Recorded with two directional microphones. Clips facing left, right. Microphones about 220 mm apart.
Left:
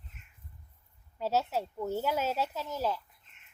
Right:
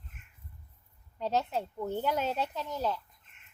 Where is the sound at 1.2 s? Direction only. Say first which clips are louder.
Left 1 dB; 5° left (ahead or behind).